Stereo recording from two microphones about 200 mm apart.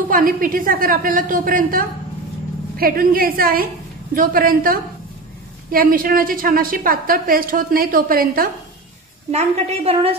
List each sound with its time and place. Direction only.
0.1 s a woman's voice: 45° right (ahead or behind)
9.3 s a woman's voice: 30° right (ahead or behind)